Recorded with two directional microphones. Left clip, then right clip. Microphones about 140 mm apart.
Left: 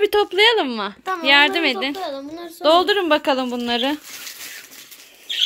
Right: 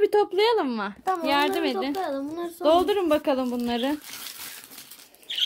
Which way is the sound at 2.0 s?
75° right (ahead or behind).